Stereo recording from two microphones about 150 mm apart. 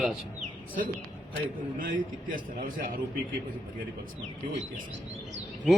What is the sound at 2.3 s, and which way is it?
Speech, 65° right (ahead or behind).